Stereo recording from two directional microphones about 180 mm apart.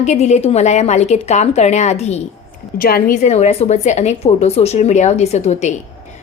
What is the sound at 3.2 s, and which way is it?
A woman's voice, 40° left (ahead or behind).